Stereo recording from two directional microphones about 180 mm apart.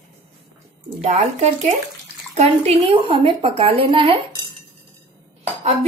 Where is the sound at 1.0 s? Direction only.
40° right (ahead or behind).